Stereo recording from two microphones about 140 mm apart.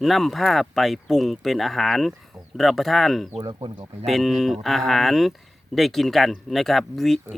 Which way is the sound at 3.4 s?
30° right (ahead or behind).